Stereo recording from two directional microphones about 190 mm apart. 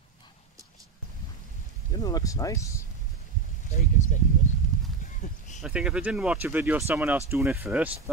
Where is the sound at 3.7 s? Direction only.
40° left (ahead or behind).